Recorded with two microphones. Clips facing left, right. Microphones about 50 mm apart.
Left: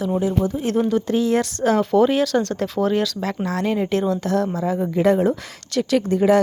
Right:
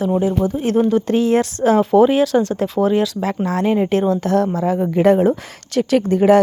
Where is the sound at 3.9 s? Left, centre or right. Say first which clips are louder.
Right 4 dB; right.